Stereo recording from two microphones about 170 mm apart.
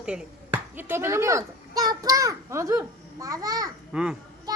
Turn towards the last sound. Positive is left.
turn(degrees=-25)  # may be behind; listen again after turning